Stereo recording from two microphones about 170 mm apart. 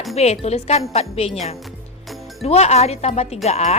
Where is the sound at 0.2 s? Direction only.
40° left (ahead or behind).